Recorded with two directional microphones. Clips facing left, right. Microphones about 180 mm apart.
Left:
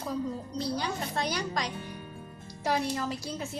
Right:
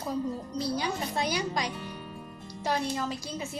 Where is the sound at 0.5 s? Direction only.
5° right (ahead or behind).